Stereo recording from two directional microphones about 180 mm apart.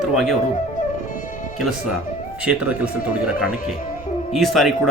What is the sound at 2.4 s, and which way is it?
Speech, 5° right (ahead or behind).